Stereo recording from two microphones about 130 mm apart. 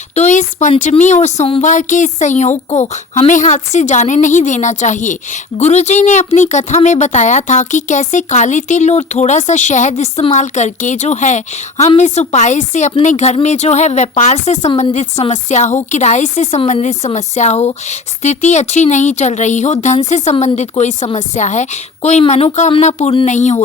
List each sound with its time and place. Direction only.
0.1 s speech: 65° left (ahead or behind)